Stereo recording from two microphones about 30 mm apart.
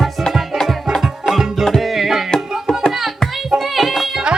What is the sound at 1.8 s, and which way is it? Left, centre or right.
Music, centre.